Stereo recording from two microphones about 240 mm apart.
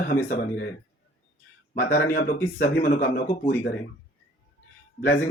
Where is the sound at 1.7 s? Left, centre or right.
Left.